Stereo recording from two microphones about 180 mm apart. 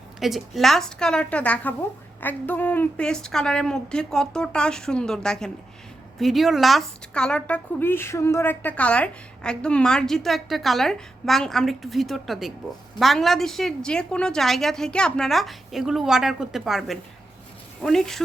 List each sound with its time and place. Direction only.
0.2 s a woman's voice: centre (ahead or behind)